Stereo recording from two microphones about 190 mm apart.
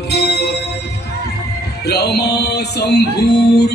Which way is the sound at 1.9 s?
60° left (ahead or behind).